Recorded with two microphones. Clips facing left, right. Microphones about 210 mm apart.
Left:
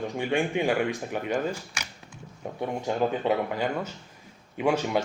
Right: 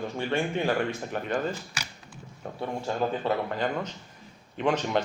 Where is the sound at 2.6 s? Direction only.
15° left (ahead or behind).